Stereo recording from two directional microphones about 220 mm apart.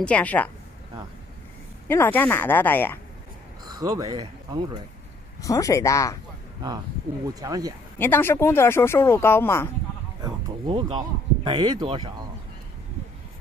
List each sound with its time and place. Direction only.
0.0 s speech: 5° left (ahead or behind)
1.9 s speech: 10° left (ahead or behind)
3.6 s speech: 15° right (ahead or behind)
5.4 s speech: 15° left (ahead or behind)
7.3 s speech: 15° right (ahead or behind)
8.0 s speech: 10° left (ahead or behind)
10.2 s speech: 20° right (ahead or behind)